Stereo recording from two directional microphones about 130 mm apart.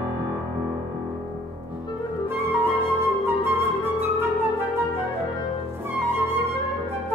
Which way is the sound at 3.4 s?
15° right (ahead or behind).